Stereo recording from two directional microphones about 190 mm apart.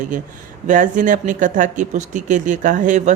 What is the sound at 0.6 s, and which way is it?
Speech, 40° right (ahead or behind).